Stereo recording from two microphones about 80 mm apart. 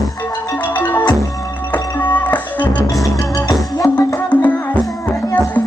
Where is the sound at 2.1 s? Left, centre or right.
Centre.